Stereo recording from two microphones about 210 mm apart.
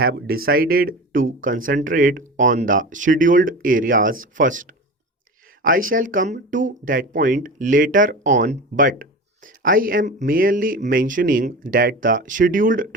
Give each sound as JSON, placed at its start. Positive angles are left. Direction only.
{"t": 0.0, "sound": "speech", "side_deg": -45}